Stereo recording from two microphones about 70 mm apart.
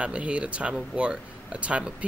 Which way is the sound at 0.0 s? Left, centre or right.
Centre.